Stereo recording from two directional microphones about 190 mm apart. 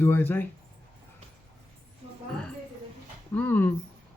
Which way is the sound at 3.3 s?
10° left (ahead or behind).